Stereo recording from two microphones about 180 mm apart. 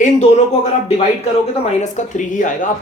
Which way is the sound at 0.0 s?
40° left (ahead or behind).